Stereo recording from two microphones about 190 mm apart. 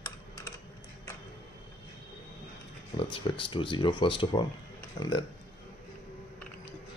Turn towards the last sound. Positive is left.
turn(degrees=25)  # may be behind; listen again after turning